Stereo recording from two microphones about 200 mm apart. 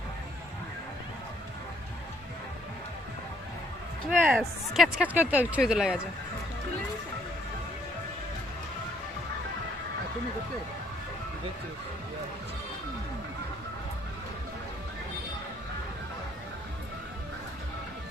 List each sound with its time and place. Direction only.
4.1 s speech: 5° right (ahead or behind)